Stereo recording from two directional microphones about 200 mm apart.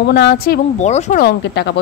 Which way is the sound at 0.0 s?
55° left (ahead or behind).